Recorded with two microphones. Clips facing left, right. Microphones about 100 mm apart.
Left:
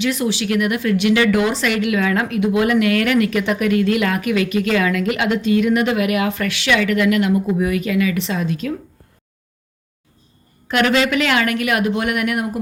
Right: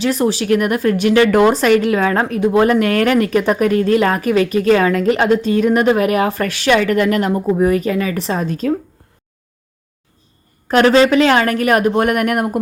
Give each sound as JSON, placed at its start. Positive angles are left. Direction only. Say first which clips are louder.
{"t": 0.0, "sound": "a woman's voice", "louder": "right 4 dB", "side_deg": -40}
{"t": 10.7, "sound": "a woman's voice", "louder": "right 6 dB", "side_deg": -35}